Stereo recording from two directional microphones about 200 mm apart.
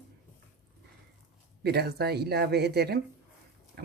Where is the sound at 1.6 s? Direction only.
55° right (ahead or behind).